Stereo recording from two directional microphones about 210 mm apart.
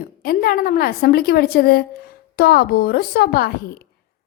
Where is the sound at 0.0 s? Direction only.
45° left (ahead or behind).